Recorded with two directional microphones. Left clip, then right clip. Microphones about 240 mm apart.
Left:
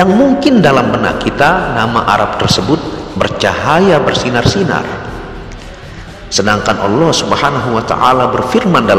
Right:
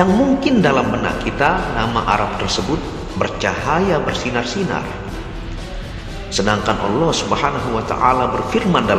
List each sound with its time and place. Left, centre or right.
0.0 s a man's voice: left
6.3 s a man's voice: left